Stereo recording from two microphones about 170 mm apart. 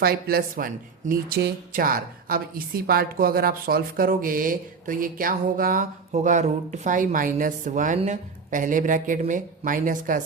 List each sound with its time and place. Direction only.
0.0 s speech: 60° right (ahead or behind)
6.1 s speech: 45° right (ahead or behind)